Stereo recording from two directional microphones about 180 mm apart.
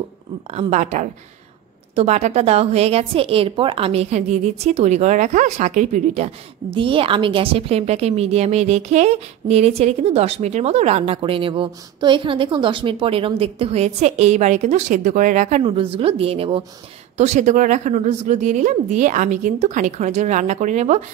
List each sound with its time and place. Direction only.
0.5 s speech: 35° right (ahead or behind)
15.6 s speech: 30° right (ahead or behind)